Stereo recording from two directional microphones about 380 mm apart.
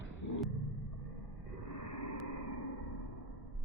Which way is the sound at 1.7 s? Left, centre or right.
Left.